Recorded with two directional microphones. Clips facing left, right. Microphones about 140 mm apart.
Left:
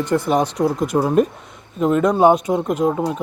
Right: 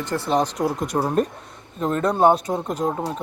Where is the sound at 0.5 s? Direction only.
Centre (ahead or behind).